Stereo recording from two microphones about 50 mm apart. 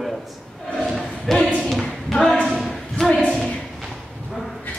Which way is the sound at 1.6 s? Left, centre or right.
Centre.